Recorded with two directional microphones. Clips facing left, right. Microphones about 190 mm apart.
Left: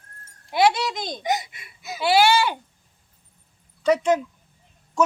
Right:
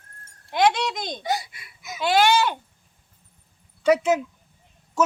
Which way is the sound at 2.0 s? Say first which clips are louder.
Left 1 dB; 10° left (ahead or behind).